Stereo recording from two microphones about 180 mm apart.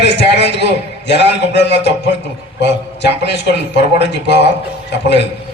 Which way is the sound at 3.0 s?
75° left (ahead or behind).